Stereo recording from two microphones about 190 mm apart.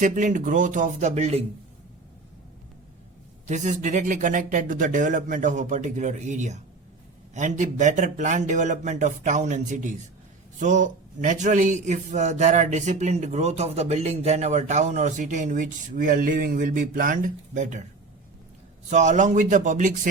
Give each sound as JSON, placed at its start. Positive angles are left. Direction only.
{"t": 0.0, "sound": "a man's voice", "side_deg": -40}
{"t": 3.4, "sound": "a man's voice", "side_deg": -40}
{"t": 18.9, "sound": "a man's voice", "side_deg": -40}